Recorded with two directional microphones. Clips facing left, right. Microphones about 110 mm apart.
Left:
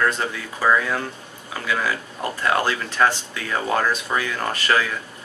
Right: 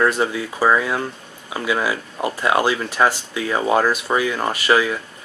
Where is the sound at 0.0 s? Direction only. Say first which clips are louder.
Right 4 dB; 15° right (ahead or behind).